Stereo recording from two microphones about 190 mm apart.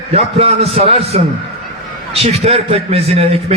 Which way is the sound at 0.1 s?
30° right (ahead or behind).